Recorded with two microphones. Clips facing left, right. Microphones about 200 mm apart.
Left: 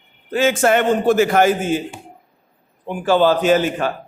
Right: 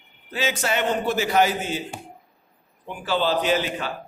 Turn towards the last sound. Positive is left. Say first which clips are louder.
# left 7 dB
turn(degrees=50)  # may be behind; listen again after turning